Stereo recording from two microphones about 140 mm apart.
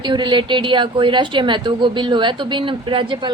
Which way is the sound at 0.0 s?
35° right (ahead or behind).